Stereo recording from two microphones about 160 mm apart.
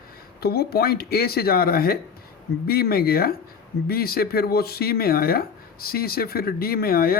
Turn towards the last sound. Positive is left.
turn(degrees=70)  # may be behind; listen again after turning